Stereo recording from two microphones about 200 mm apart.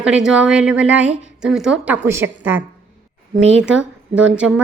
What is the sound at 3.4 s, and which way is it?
Speech, 70° right (ahead or behind).